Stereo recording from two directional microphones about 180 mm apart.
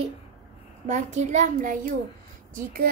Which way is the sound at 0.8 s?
40° right (ahead or behind).